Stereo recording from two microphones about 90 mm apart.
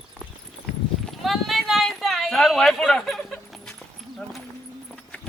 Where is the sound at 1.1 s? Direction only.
Centre (ahead or behind).